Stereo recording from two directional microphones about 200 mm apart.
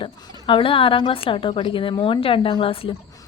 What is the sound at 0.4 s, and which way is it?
A woman's voice, 25° left (ahead or behind).